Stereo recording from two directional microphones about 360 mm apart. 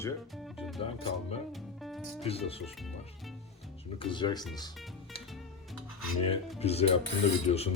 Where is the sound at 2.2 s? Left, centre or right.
Centre.